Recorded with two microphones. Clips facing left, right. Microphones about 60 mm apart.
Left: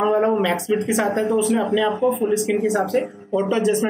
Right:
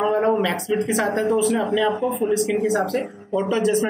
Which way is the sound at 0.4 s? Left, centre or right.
Centre.